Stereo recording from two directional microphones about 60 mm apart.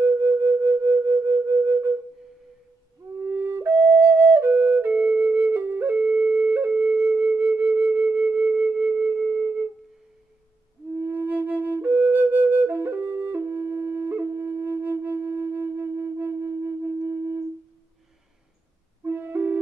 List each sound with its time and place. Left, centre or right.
0.0 s music: right
3.0 s music: right
3.3 s flute: right
11.0 s flute: right
19.0 s music: right